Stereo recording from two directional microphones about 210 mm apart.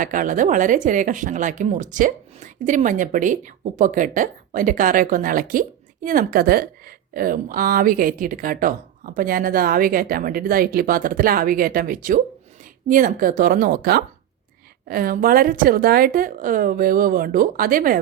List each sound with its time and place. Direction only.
0.0 s a woman's voice: 40° right (ahead or behind)